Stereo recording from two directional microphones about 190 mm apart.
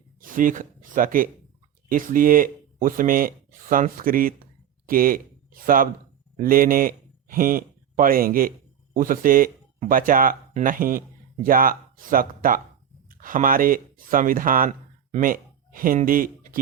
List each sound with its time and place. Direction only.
0.2 s a man's voice: 45° right (ahead or behind)